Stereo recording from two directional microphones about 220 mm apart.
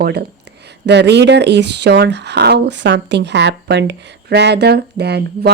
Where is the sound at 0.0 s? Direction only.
45° right (ahead or behind).